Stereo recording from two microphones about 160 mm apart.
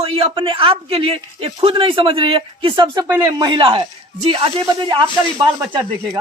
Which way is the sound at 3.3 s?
30° right (ahead or behind).